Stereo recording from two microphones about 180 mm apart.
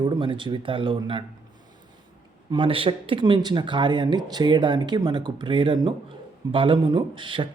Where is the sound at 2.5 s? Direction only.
30° right (ahead or behind).